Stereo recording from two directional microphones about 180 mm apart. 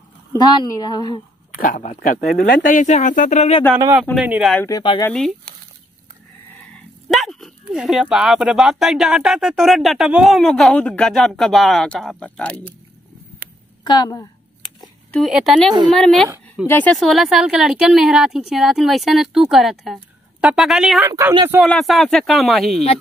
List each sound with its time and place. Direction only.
0.3 s a woman's voice: 25° left (ahead or behind)
1.5 s speech: 50° left (ahead or behind)
4.2 s speech: 5° right (ahead or behind)
4.6 s a woman's voice: 20° left (ahead or behind)
7.1 s speech: centre (ahead or behind)
13.8 s a sound: 20° left (ahead or behind)
15.2 s speech: 5° right (ahead or behind)
21.0 s speech: 15° right (ahead or behind)
21.6 s speech: centre (ahead or behind)